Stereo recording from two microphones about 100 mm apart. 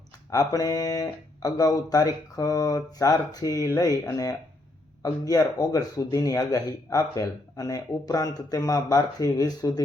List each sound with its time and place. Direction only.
0.3 s speech: 35° left (ahead or behind)